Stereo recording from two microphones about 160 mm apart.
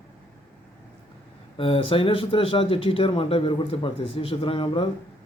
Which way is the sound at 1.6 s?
35° left (ahead or behind).